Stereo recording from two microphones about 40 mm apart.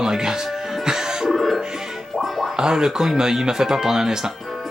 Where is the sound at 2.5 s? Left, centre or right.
Centre.